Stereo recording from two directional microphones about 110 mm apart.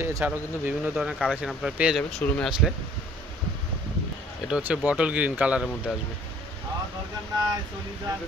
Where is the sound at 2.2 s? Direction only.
20° left (ahead or behind).